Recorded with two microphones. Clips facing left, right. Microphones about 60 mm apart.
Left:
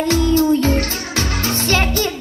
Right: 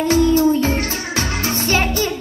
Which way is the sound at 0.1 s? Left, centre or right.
Right.